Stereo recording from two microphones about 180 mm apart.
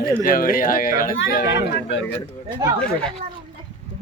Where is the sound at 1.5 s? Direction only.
90° left.